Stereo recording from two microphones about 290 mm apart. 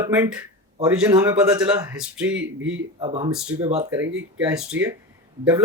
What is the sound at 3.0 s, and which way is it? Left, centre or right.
Speech, centre.